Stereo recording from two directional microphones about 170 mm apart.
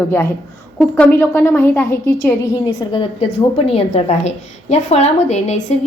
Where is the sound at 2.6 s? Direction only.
30° left (ahead or behind).